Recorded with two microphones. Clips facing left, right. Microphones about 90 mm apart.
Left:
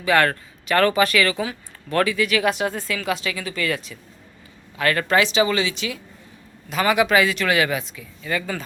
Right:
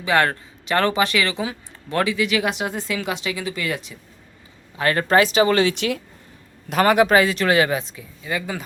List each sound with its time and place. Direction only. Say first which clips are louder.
0.0 s speech: left 1 dB; 20° right (ahead or behind)
4.8 s a woman's voice: right 2 dB; 30° right (ahead or behind)
8.2 s speech: left 1 dB; 15° right (ahead or behind)